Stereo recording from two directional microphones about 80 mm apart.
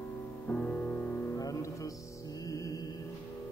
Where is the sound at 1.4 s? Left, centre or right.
Left.